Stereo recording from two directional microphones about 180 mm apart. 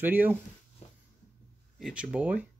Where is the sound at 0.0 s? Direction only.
10° right (ahead or behind).